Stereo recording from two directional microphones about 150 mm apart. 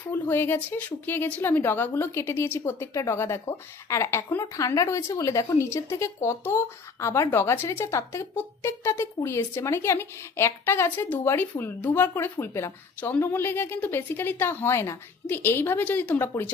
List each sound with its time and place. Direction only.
0.1 s speech: 15° left (ahead or behind)